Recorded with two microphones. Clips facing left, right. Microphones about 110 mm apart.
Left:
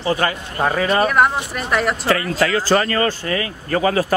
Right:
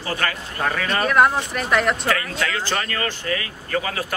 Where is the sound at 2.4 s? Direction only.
35° left (ahead or behind).